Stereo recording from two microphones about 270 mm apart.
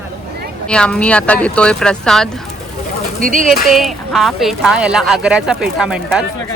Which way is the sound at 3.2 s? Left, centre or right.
Right.